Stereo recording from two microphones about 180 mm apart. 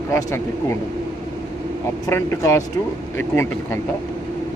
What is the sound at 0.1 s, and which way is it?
Speech, 15° left (ahead or behind).